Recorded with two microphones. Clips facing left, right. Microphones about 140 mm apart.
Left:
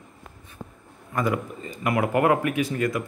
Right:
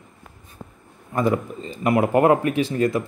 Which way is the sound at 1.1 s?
25° right (ahead or behind).